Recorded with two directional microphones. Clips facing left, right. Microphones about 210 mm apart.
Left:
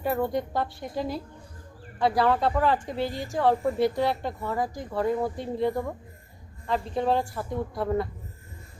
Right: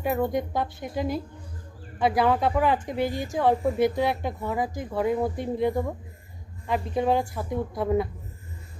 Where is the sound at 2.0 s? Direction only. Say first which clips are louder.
Right 1 dB; 20° right (ahead or behind).